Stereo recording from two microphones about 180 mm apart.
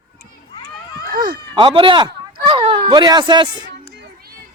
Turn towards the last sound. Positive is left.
turn(degrees=-25)  # may be behind; listen again after turning